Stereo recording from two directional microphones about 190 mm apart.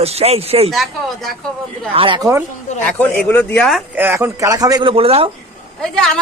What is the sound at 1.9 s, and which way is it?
Speech, 25° right (ahead or behind).